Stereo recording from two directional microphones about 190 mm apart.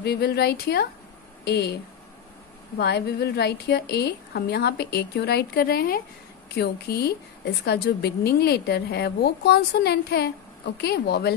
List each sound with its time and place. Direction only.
0.0 s a woman's voice: 60° left (ahead or behind)
2.8 s a woman's voice: 60° left (ahead or behind)